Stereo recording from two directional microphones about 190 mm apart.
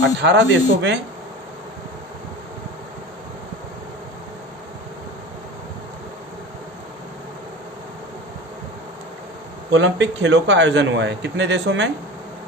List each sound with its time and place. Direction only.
0.2 s a man's voice: 65° right (ahead or behind)
9.7 s a man's voice: 70° right (ahead or behind)